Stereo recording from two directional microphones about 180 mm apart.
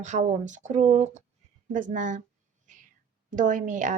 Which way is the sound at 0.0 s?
45° right (ahead or behind).